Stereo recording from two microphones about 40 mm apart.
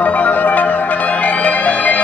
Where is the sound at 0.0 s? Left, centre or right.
Left.